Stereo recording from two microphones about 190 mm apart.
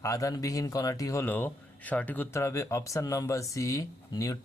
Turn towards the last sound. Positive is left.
turn(degrees=20)  # may be behind; listen again after turning